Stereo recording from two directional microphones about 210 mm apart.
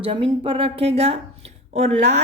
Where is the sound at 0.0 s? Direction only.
25° right (ahead or behind).